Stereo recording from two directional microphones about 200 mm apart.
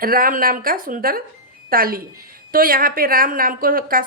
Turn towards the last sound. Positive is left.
turn(degrees=-45)  # may be behind; listen again after turning